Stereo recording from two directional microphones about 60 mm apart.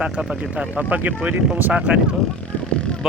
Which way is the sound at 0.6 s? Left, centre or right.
Right.